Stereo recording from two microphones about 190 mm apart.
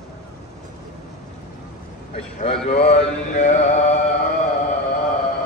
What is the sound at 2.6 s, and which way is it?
Mantra, 30° left (ahead or behind).